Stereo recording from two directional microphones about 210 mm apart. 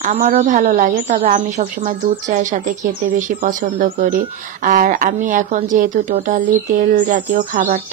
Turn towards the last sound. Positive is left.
turn(degrees=-40)  # may be behind; listen again after turning